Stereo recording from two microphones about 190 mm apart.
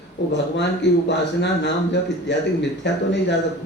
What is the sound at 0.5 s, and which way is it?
Speech, 65° left (ahead or behind).